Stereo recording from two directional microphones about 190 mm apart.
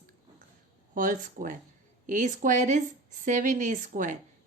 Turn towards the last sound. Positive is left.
turn(degrees=-45)  # may be behind; listen again after turning